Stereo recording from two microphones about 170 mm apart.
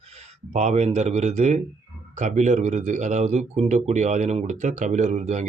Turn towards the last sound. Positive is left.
turn(degrees=-40)  # may be behind; listen again after turning